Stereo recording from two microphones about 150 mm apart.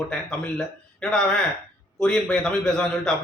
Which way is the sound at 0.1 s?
5° left (ahead or behind).